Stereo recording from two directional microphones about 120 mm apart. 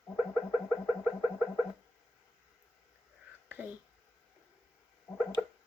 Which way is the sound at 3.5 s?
15° right (ahead or behind).